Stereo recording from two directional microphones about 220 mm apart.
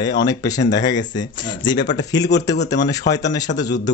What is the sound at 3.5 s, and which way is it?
Speech, 35° left (ahead or behind).